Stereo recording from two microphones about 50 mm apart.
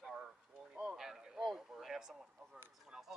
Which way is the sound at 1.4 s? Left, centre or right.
Centre.